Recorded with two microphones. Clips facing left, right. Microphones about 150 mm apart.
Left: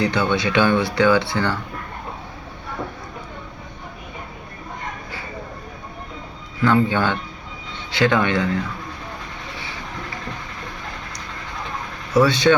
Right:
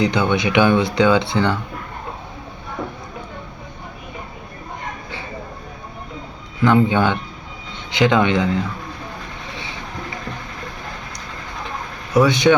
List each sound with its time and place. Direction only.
0.0 s speech: 15° right (ahead or behind)
6.6 s speech: 20° right (ahead or behind)
12.1 s speech: 15° right (ahead or behind)